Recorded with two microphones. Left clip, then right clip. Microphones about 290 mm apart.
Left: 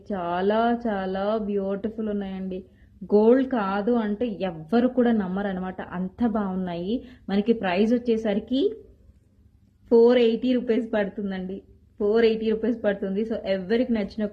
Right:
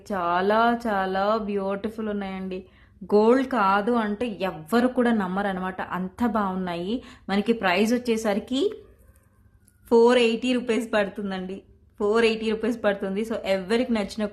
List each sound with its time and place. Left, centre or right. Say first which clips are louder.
0.1 s a woman's voice: right 2 dB; centre
9.9 s a woman's voice: left 1 dB; centre